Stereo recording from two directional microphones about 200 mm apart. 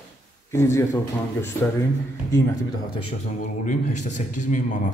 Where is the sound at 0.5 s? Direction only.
15° left (ahead or behind).